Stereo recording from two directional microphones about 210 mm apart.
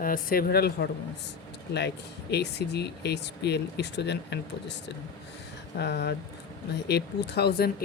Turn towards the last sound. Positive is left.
turn(degrees=50)  # may be behind; listen again after turning